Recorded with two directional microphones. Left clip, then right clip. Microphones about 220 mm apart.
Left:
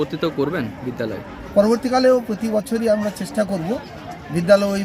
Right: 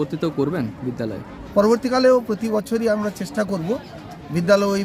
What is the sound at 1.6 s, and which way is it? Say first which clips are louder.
A man's voice: left 1 dB; 5° right (ahead or behind).